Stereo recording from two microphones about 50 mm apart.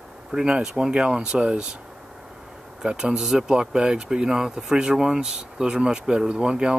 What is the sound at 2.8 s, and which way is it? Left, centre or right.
Speech, centre.